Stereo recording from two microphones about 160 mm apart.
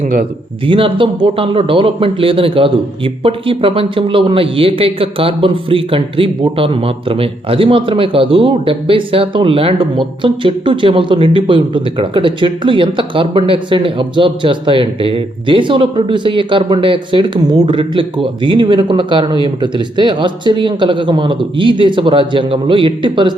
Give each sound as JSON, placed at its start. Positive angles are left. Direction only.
{"t": 0.7, "sound": "a man's voice", "side_deg": -35}